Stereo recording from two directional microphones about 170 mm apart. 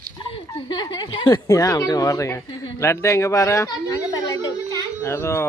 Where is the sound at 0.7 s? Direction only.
25° left (ahead or behind).